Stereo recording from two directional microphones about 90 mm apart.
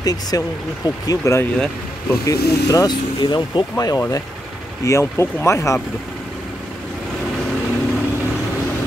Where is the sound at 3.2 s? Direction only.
55° left (ahead or behind).